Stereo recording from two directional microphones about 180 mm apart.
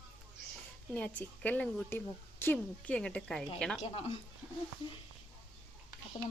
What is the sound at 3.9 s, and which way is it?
Speech, 35° left (ahead or behind).